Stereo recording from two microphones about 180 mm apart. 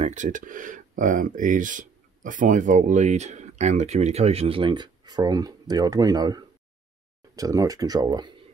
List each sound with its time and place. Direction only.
0.0 s speech: 45° right (ahead or behind); by 8.3 s 25° right (ahead or behind)